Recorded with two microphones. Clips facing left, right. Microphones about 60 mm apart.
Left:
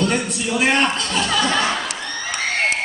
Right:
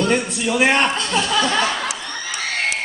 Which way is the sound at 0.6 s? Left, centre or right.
Right.